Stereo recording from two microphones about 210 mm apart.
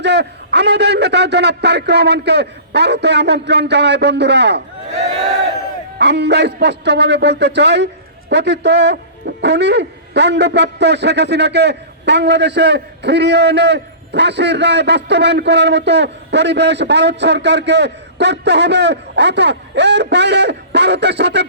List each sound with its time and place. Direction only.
0.0 s a man's voice: 55° right (ahead or behind)